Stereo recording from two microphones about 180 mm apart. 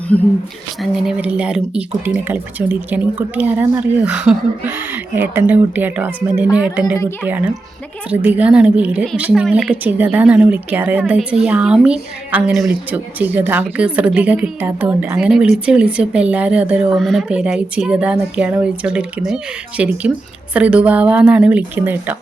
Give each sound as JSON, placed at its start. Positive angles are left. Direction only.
{"t": 0.1, "sound": "a woman's voice", "side_deg": 10}
{"t": 0.8, "sound": "speech", "side_deg": 0}
{"t": 6.9, "sound": "a woman's voice", "side_deg": 15}
{"t": 7.3, "sound": "speech", "side_deg": -10}